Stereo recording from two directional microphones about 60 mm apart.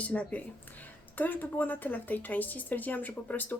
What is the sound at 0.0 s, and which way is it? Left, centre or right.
Speech, left.